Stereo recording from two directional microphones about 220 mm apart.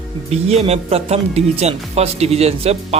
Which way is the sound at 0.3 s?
30° right (ahead or behind).